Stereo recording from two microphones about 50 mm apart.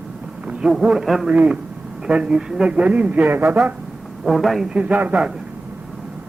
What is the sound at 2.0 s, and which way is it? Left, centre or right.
A man's voice, centre.